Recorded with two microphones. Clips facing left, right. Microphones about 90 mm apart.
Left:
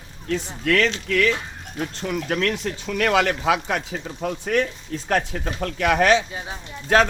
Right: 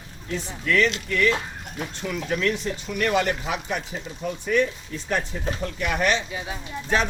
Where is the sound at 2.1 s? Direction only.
60° left (ahead or behind); by 5.9 s 90° left.